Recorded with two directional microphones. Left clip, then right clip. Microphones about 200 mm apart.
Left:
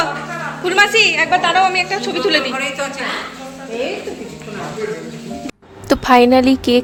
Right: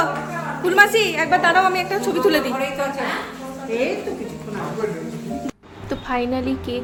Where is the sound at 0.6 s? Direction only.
10° right (ahead or behind).